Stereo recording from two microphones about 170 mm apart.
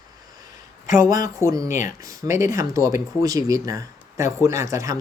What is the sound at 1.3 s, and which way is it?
Speech, 20° right (ahead or behind).